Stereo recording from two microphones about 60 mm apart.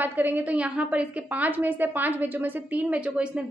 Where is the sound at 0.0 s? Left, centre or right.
Right.